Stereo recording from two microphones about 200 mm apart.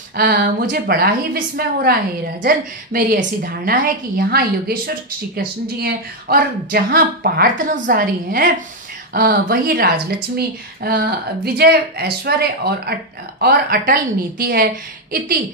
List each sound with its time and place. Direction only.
0.1 s a woman's voice: 50° right (ahead or behind)